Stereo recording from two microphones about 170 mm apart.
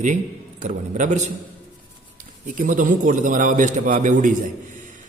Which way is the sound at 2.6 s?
50° right (ahead or behind).